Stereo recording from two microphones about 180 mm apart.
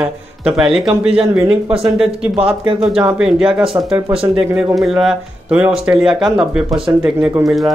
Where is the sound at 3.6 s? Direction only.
30° right (ahead or behind).